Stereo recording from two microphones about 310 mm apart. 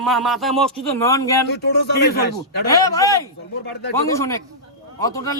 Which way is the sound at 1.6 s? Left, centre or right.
Left.